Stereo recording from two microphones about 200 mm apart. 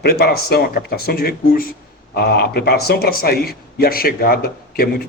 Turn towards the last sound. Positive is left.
turn(degrees=50)  # may be behind; listen again after turning